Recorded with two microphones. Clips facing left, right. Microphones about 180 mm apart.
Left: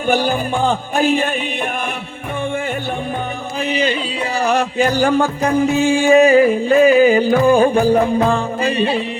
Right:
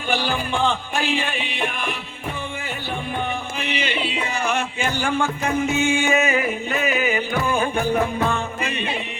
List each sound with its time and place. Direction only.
0.1 s music: 45° left (ahead or behind)
3.6 s a sound: 40° left (ahead or behind)
4.4 s music: 35° left (ahead or behind)